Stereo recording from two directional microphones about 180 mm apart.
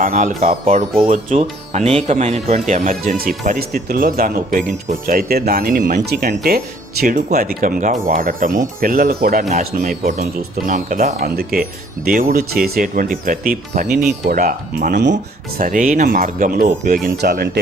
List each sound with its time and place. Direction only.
0.0 s speech: 45° right (ahead or behind)
11.3 s speech: 55° right (ahead or behind)
17.2 s speech: 60° right (ahead or behind)